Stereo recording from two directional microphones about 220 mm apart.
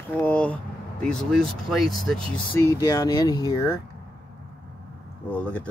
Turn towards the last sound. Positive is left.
turn(degrees=5)  # may be behind; listen again after turning